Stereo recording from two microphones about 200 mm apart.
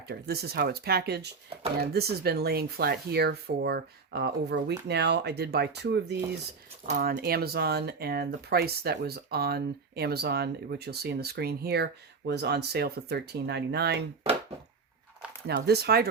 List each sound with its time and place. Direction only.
0.1 s speech: 55° right (ahead or behind)
15.4 s speech: 55° right (ahead or behind)